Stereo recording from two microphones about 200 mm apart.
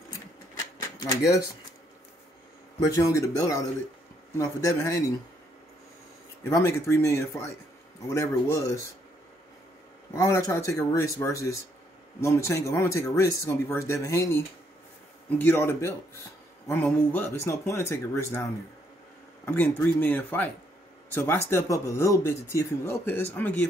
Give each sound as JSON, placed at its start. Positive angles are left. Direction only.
{"t": 0.9, "sound": "speech", "side_deg": 15}
{"t": 2.8, "sound": "speech", "side_deg": 15}
{"t": 6.4, "sound": "speech", "side_deg": 15}
{"t": 10.1, "sound": "speech", "side_deg": 15}
{"t": 19.4, "sound": "speech", "side_deg": 10}